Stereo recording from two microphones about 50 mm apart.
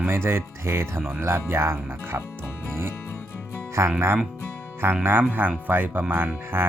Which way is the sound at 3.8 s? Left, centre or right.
Right.